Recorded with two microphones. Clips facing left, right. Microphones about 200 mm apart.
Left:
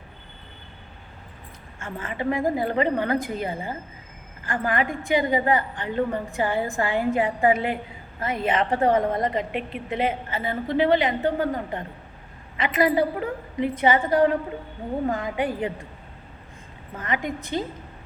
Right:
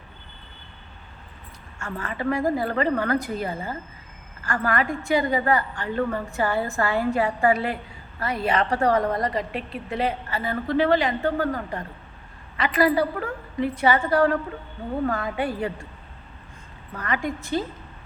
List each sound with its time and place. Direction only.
1.8 s a woman's voice: 20° left (ahead or behind)
16.9 s a woman's voice: 20° left (ahead or behind)